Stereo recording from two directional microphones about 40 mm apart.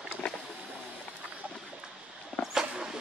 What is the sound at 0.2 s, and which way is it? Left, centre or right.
Boat, left.